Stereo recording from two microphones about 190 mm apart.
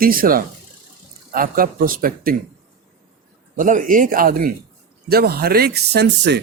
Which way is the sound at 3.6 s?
45° right (ahead or behind).